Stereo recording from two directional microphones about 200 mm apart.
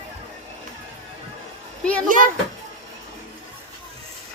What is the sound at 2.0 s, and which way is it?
Speech, 40° right (ahead or behind).